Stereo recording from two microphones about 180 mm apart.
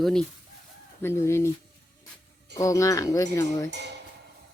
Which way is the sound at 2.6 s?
15° left (ahead or behind).